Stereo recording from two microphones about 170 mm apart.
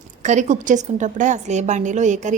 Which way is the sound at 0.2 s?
45° right (ahead or behind).